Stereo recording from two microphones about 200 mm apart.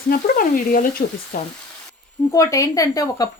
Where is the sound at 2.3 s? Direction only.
15° left (ahead or behind).